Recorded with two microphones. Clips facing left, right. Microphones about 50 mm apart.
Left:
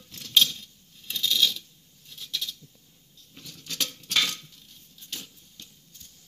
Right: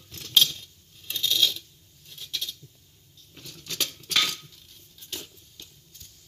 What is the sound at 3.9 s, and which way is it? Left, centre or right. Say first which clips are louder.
Dishes: even; right.